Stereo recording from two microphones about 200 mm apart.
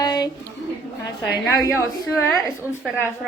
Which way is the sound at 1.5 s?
15° left (ahead or behind).